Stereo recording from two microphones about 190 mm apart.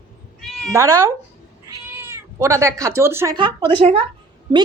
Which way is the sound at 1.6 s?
15° right (ahead or behind).